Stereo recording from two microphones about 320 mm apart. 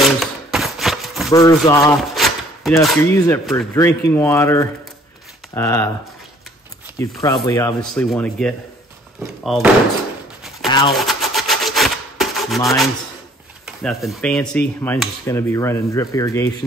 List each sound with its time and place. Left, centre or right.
0.2 s a sound: centre
1.3 s rub: centre
7.0 s speech: centre
9.2 s door: centre
10.9 s rub: centre
13.7 s rub: centre